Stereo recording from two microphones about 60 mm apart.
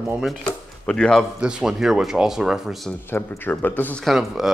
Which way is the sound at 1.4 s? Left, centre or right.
Centre.